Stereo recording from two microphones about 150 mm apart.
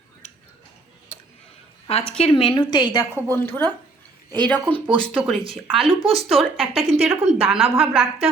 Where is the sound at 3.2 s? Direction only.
15° left (ahead or behind).